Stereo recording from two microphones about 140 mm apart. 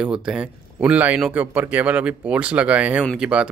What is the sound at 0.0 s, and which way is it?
A man's voice, 5° right (ahead or behind).